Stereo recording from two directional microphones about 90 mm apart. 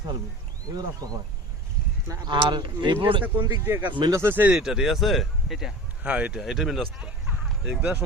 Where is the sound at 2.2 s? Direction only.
60° right (ahead or behind).